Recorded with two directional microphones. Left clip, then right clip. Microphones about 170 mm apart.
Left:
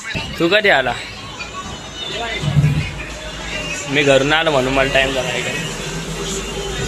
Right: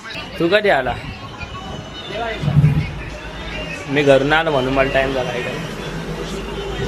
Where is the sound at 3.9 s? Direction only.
Centre (ahead or behind).